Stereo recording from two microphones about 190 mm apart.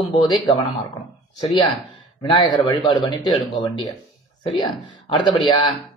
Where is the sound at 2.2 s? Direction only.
25° left (ahead or behind).